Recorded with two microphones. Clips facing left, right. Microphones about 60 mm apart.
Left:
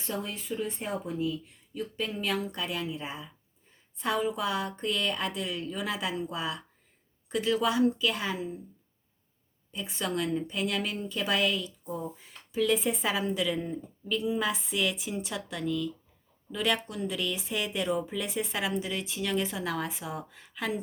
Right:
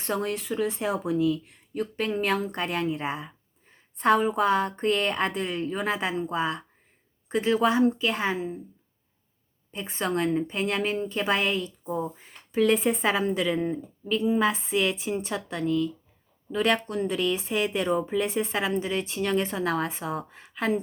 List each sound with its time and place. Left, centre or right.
0.0 s a woman's voice: right
9.7 s a woman's voice: right